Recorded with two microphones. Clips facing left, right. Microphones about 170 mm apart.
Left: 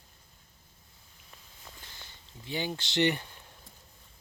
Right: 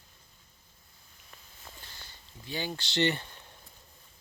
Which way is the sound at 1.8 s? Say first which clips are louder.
Even; 20° left (ahead or behind).